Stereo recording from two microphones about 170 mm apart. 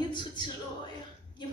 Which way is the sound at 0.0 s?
25° left (ahead or behind).